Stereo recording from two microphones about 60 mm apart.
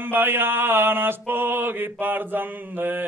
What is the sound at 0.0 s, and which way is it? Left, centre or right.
Mantra, right.